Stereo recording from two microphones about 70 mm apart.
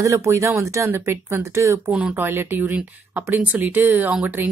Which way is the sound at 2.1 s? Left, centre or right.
Right.